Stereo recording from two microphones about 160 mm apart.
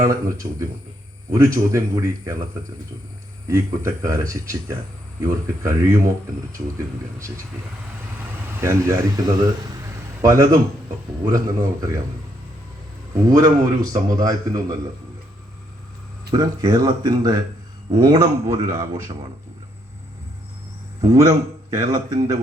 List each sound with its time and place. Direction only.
0.0 s a man's voice: 20° right (ahead or behind)
3.4 s a man's voice: 20° right (ahead or behind)
8.6 s a man's voice: 20° right (ahead or behind)
13.2 s a man's voice: 20° right (ahead or behind)
16.3 s a man's voice: 25° right (ahead or behind)
21.0 s a man's voice: 25° right (ahead or behind)